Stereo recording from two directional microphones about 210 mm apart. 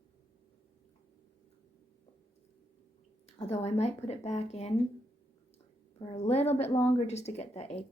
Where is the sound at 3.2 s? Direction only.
30° left (ahead or behind).